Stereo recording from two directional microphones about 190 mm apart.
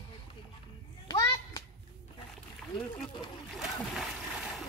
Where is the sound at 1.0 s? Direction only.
15° left (ahead or behind).